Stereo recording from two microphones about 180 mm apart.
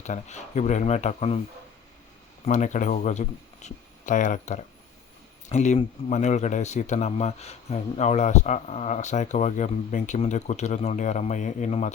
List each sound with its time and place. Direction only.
0.0 s speech: 40° left (ahead or behind)
2.4 s speech: 40° left (ahead or behind)